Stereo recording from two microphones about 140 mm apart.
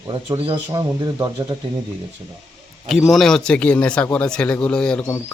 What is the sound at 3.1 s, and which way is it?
Speech, 5° left (ahead or behind).